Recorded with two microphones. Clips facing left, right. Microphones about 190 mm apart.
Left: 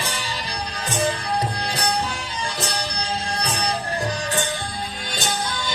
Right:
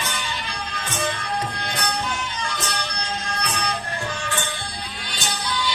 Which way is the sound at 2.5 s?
35° left (ahead or behind).